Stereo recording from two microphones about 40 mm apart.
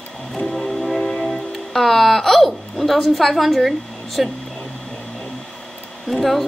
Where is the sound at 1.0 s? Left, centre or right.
Centre.